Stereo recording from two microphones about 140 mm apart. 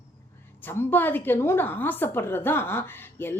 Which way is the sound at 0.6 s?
15° left (ahead or behind).